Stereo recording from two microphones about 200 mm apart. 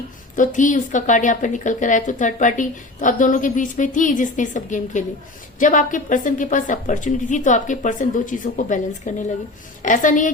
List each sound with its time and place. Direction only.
0.3 s a woman's voice: 40° left (ahead or behind)